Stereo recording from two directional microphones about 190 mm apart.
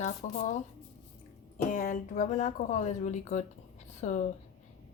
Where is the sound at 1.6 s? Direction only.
45° left (ahead or behind).